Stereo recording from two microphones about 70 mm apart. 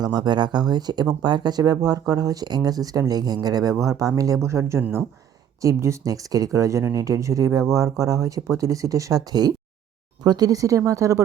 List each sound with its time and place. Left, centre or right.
0.0 s speech: right
4.4 s speech: right
9.3 s speech: right